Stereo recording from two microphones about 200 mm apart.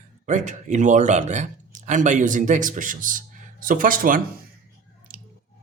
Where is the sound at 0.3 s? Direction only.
40° right (ahead or behind).